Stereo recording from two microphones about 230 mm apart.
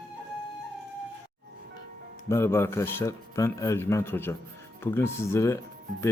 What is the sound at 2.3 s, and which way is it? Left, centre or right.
Speech, centre.